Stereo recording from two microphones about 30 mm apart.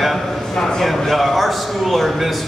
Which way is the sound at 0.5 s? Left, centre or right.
Left.